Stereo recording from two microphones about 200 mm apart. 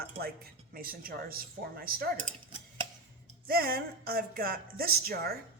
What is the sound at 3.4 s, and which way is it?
Speech, 50° right (ahead or behind).